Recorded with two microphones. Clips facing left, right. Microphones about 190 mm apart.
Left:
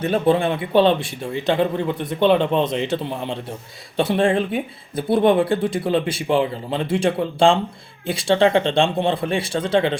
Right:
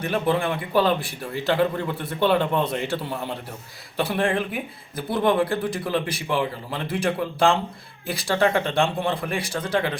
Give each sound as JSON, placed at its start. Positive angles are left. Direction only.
{"t": 0.0, "sound": "speech", "side_deg": 25}